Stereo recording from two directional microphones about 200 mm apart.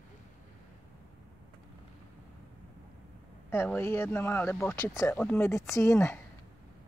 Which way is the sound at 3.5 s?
10° left (ahead or behind).